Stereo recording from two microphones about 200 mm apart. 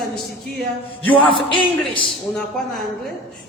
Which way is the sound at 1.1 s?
25° left (ahead or behind).